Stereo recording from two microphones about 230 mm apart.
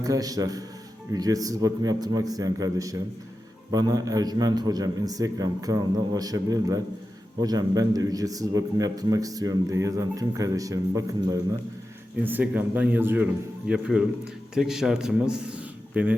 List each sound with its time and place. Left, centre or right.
0.0 s a man's voice: centre